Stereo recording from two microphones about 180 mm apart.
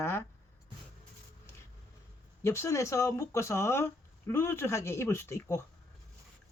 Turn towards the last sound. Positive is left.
turn(degrees=15)  # may be behind; listen again after turning